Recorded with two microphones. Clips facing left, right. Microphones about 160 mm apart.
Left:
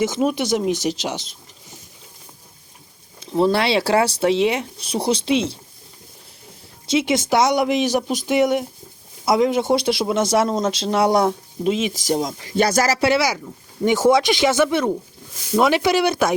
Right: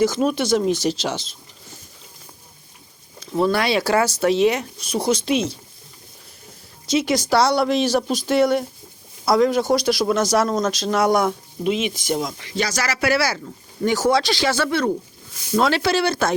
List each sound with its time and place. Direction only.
0.0 s speech: 20° left (ahead or behind)
3.2 s speech: 25° left (ahead or behind)
6.9 s speech: 25° left (ahead or behind)
12.5 s speech: 50° left (ahead or behind)
13.0 s speech: 20° left (ahead or behind)